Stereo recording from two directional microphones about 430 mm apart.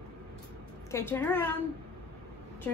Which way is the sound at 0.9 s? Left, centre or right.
Centre.